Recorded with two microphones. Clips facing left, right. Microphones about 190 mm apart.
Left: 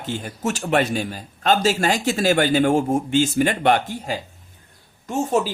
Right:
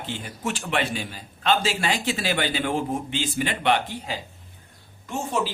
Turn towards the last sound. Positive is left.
turn(degrees=45)  # may be behind; listen again after turning